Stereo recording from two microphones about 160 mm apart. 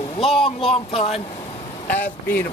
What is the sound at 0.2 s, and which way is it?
A man's voice, 35° left (ahead or behind).